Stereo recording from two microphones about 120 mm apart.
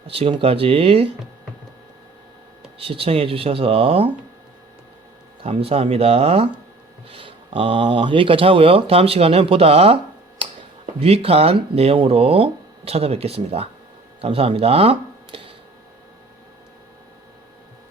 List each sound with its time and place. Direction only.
0.1 s speech: 50° right (ahead or behind)
2.7 s speech: 50° right (ahead or behind)
5.4 s speech: 50° right (ahead or behind)